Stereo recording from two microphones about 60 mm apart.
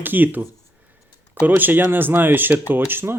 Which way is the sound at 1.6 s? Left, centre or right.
Right.